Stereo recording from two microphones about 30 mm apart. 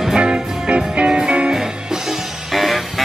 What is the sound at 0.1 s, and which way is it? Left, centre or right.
Music, right.